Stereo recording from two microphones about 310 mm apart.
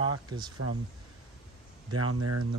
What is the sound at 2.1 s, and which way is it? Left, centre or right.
Speech, right.